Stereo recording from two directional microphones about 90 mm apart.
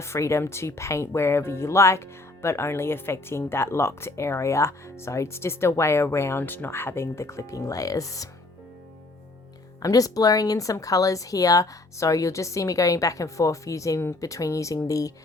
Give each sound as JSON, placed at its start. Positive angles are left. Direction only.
{"t": 0.0, "sound": "speech", "side_deg": 30}
{"t": 9.8, "sound": "speech", "side_deg": 40}